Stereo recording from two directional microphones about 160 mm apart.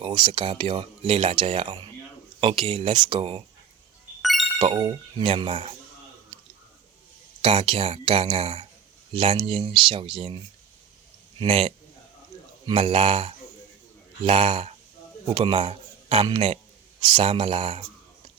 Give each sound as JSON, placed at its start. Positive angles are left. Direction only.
{"t": 0.0, "sound": "speech", "side_deg": -30}
{"t": 4.2, "sound": "music", "side_deg": 0}
{"t": 4.5, "sound": "speech", "side_deg": -30}
{"t": 7.4, "sound": "a man's voice", "side_deg": -35}